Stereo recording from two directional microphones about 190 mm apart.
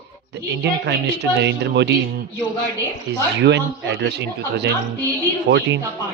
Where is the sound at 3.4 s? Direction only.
65° right (ahead or behind).